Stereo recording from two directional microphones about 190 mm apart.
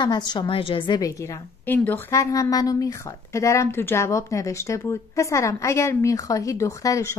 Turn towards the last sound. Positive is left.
turn(degrees=15)  # may be behind; listen again after turning